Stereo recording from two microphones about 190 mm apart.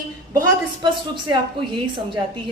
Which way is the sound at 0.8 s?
25° right (ahead or behind).